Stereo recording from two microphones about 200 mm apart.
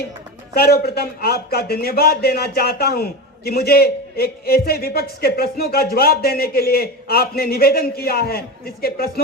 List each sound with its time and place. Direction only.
0.5 s speech: 50° left (ahead or behind)